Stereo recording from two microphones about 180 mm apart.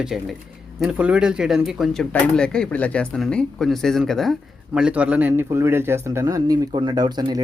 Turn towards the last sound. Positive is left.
turn(degrees=-25)  # may be behind; listen again after turning